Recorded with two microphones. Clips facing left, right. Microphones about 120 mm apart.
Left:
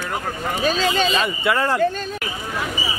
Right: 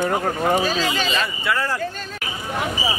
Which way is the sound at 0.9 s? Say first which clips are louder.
Left 3 dB; 20° left (ahead or behind).